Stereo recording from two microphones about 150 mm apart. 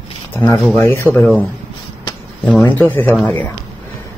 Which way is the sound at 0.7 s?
15° left (ahead or behind).